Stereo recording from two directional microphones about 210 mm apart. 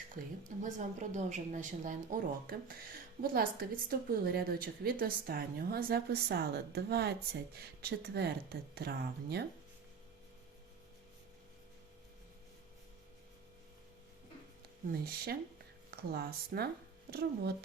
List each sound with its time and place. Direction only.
0.2 s a woman's voice: 45° right (ahead or behind)
14.8 s a woman's voice: 45° right (ahead or behind)